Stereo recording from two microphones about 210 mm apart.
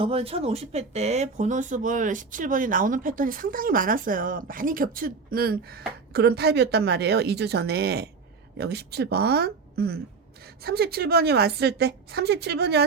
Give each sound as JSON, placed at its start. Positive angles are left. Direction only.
{"t": 0.0, "sound": "a woman's voice", "side_deg": -25}